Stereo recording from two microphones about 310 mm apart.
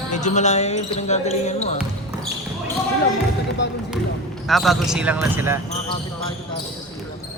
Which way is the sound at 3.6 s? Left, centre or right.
Left.